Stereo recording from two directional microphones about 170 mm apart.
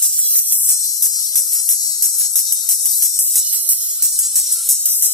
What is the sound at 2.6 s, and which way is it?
Cricket, 20° left (ahead or behind).